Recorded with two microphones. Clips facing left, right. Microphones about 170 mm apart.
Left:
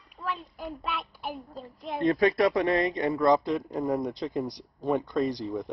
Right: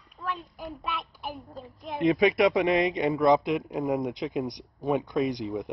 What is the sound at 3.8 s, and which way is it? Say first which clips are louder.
Speech: even; centre (ahead or behind).